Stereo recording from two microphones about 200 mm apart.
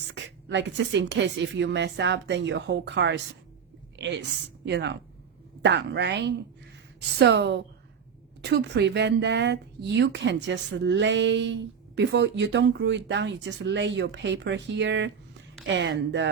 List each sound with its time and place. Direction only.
0.1 s a woman's voice: 65° right (ahead or behind)